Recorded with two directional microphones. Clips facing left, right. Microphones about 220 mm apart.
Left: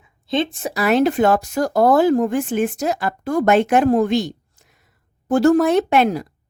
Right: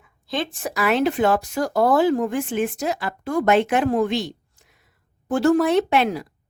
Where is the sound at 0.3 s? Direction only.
25° left (ahead or behind).